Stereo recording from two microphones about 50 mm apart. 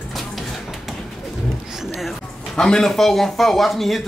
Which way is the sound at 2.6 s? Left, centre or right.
Centre.